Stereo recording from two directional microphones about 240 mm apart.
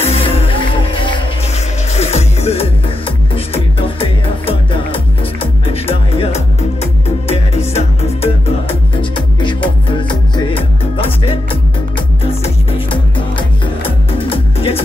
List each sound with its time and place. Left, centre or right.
0.0 s music: left
12.3 s music: left